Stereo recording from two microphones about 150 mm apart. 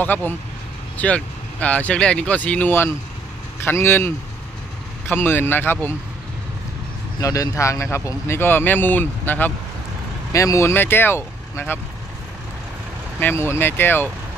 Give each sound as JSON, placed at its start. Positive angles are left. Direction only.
{"t": 0.0, "sound": "speech", "side_deg": 10}
{"t": 7.2, "sound": "speech", "side_deg": 25}
{"t": 13.2, "sound": "speech", "side_deg": 15}